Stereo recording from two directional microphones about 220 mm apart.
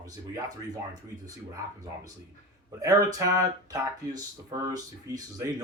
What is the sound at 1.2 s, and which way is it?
Speech, 15° right (ahead or behind).